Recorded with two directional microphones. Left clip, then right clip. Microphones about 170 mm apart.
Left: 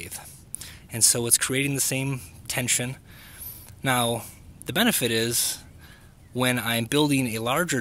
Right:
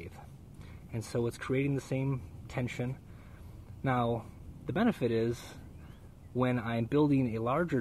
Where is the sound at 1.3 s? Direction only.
20° left (ahead or behind).